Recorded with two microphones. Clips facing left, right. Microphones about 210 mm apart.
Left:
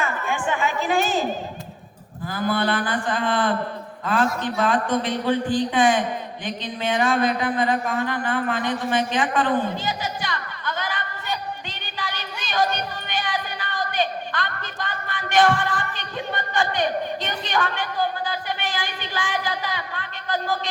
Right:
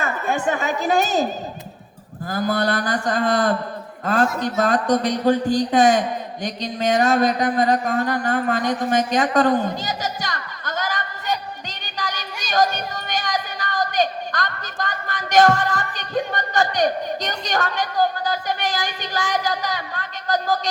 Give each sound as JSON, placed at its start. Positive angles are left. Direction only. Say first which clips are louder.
{"t": 0.0, "sound": "a woman's voice", "louder": "right 3 dB", "side_deg": -40}
{"t": 11.9, "sound": "music", "louder": "right 3 dB", "side_deg": -40}